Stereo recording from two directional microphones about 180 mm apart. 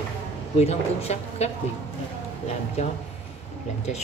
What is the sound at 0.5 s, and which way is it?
Speech, 35° left (ahead or behind).